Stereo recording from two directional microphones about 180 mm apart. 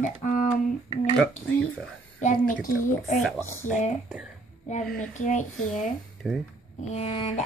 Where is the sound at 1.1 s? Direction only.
Centre (ahead or behind).